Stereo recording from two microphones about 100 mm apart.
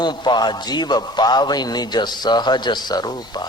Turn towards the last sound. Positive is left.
turn(degrees=40)  # may be behind; listen again after turning